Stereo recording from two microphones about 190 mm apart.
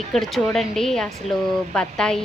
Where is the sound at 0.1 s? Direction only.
Centre (ahead or behind).